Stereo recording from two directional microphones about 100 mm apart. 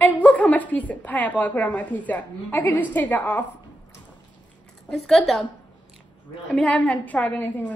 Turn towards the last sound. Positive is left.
turn(degrees=20)  # may be behind; listen again after turning